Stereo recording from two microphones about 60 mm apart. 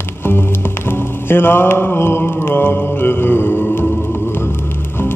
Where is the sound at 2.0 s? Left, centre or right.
Left.